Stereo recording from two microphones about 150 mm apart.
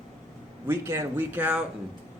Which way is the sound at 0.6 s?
15° right (ahead or behind).